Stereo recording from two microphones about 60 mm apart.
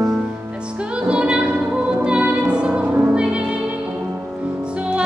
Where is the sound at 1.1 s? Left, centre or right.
Centre.